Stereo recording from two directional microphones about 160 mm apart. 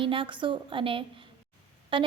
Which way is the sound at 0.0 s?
35° right (ahead or behind).